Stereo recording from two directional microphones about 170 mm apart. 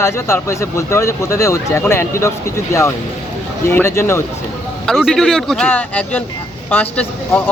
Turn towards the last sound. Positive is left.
turn(degrees=10)  # may be behind; listen again after turning